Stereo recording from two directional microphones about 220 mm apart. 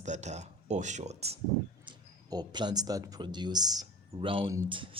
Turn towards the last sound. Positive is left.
turn(degrees=-20)  # may be behind; listen again after turning